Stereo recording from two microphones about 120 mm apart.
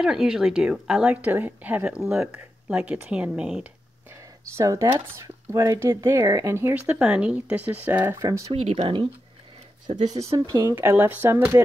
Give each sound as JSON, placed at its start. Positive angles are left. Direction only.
{"t": 0.0, "sound": "speech", "side_deg": -5}
{"t": 4.6, "sound": "speech", "side_deg": -25}
{"t": 6.7, "sound": "speech", "side_deg": -10}
{"t": 8.2, "sound": "speech", "side_deg": -30}
{"t": 8.5, "sound": "speech", "side_deg": -55}
{"t": 10.4, "sound": "speech", "side_deg": -30}